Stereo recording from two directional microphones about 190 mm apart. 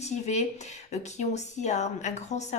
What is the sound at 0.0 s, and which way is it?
Speech, 35° left (ahead or behind).